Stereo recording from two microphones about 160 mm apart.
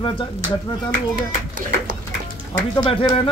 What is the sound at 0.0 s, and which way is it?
Speech, 30° left (ahead or behind).